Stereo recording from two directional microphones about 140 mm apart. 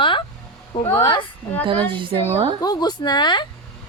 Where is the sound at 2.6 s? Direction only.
30° left (ahead or behind).